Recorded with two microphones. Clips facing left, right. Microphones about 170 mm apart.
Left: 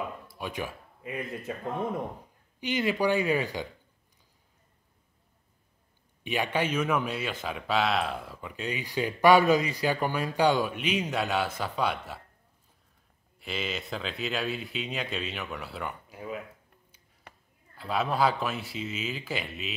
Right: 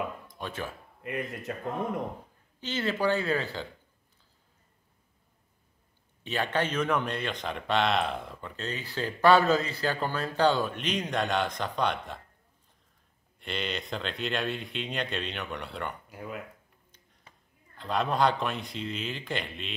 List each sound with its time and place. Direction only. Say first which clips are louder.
0.3 s speech: left 2 dB; 10° left (ahead or behind)
1.0 s speech: right 1 dB; centre (ahead or behind)
2.6 s a man's voice: left 2 dB; 15° left (ahead or behind)
6.2 s a man's voice: left 1 dB; 10° left (ahead or behind)
13.4 s speech: even; 5° left (ahead or behind)
17.3 s a sound: left 6 dB; 70° left (ahead or behind)
17.7 s speech: even; 5° left (ahead or behind)